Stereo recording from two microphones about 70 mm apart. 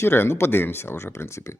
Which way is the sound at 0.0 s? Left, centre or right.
Left.